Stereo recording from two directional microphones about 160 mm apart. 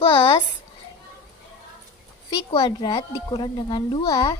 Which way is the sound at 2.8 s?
30° left (ahead or behind).